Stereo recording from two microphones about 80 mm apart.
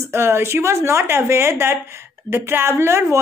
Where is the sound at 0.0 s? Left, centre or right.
Right.